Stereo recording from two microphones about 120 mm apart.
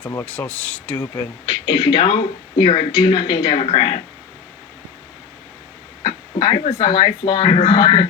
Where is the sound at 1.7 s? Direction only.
50° left (ahead or behind).